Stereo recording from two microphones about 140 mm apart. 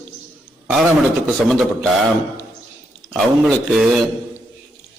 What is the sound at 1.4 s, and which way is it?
Speech, 5° right (ahead or behind).